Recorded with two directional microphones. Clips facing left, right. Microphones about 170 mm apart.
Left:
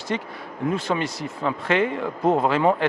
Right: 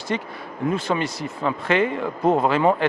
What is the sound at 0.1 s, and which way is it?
A man's voice, 10° right (ahead or behind).